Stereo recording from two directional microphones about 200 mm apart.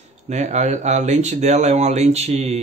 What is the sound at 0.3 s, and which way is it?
Speech, 35° right (ahead or behind).